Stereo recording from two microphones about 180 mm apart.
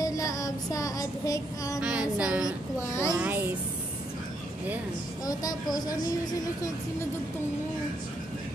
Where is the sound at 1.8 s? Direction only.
5° right (ahead or behind).